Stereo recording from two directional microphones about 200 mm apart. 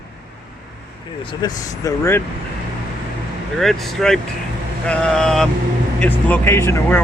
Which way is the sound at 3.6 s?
Centre (ahead or behind).